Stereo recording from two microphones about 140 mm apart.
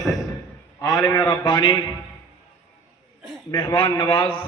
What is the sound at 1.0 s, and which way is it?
Speech, 30° left (ahead or behind).